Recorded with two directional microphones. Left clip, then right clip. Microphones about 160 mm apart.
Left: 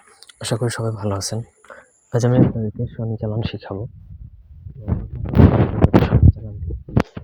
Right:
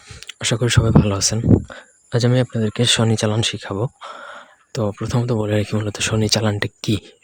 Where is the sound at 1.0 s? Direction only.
30° right (ahead or behind).